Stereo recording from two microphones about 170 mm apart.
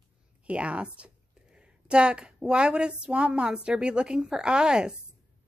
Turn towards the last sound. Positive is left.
turn(degrees=-5)  # may be behind; listen again after turning